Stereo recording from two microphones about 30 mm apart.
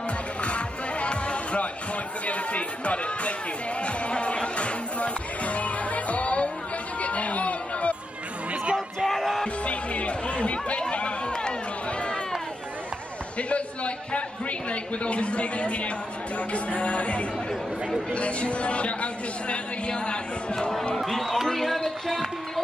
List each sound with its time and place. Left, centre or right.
0.4 s music: left
2.2 s chatter: left
3.8 s music: left
7.0 s chatter: left
8.7 s crowd: centre
9.7 s chatter: left
10.8 s run: left
13.4 s a sound: left
14.7 s a woman's voice: left
21.0 s a man's voice: centre